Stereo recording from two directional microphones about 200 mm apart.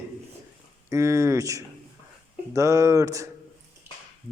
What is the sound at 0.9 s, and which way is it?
A woman's voice, 15° right (ahead or behind).